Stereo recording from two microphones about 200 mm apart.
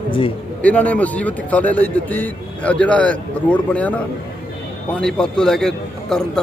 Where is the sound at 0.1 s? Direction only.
25° left (ahead or behind).